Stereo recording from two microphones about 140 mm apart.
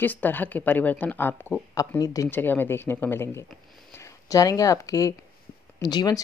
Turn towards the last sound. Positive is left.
turn(degrees=30)  # may be behind; listen again after turning